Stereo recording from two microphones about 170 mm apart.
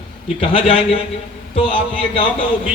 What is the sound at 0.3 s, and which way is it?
A man's voice, 30° left (ahead or behind).